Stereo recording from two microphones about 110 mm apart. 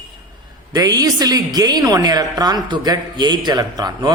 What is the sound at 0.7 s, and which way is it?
A woman's voice, 35° right (ahead or behind).